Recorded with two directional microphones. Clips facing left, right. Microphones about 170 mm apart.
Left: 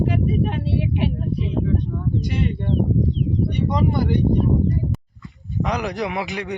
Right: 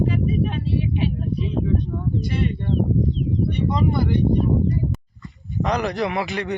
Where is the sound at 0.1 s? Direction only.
70° left (ahead or behind).